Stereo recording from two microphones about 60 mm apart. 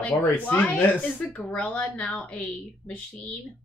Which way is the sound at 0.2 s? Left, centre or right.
Left.